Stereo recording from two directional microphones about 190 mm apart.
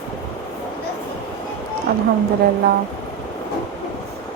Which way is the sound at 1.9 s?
55° right (ahead or behind).